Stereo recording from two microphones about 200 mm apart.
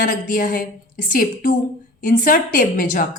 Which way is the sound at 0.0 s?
45° left (ahead or behind).